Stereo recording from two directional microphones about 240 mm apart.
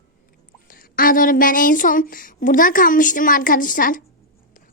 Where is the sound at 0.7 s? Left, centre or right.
Left.